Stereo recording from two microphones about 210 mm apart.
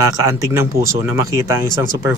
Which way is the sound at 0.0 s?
15° right (ahead or behind).